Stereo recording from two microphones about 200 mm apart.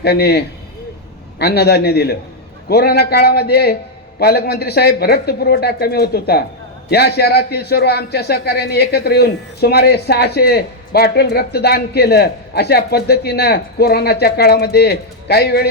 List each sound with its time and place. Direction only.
0.0 s a man's voice: 55° left (ahead or behind)